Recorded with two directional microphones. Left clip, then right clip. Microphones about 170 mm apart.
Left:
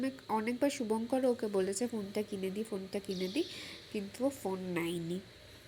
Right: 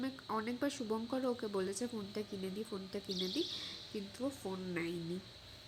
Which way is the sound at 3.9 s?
20° left (ahead or behind).